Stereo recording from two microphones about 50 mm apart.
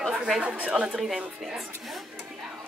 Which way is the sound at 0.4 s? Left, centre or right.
Right.